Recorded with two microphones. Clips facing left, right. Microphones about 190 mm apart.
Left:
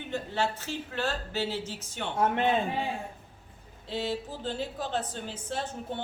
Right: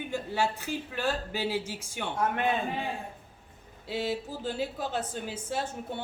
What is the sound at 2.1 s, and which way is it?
Speech, 25° left (ahead or behind).